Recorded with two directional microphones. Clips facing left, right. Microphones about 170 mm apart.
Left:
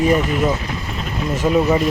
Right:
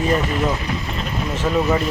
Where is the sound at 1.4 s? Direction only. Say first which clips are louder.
Left 4 dB; 10° left (ahead or behind).